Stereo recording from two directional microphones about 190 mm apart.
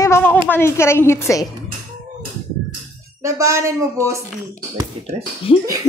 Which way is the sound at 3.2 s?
15° right (ahead or behind).